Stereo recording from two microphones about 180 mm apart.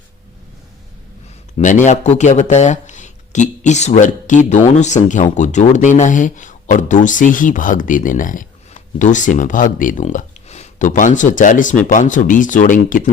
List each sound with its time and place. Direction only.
1.5 s speech: 45° left (ahead or behind)